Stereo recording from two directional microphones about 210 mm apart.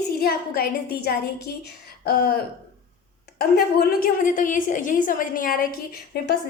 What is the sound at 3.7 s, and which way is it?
A woman's voice, 40° left (ahead or behind).